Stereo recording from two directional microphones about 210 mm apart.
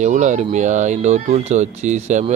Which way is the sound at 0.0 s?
35° right (ahead or behind).